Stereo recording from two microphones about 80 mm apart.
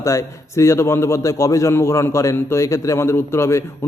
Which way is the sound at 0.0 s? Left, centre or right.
Left.